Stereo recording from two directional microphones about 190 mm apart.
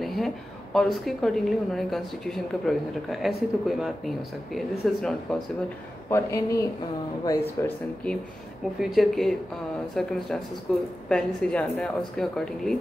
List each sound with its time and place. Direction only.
0.0 s a sound: centre (ahead or behind)
0.7 s a woman's voice: centre (ahead or behind)
6.0 s speech: 15° left (ahead or behind)
7.6 s a woman's voice: 5° left (ahead or behind)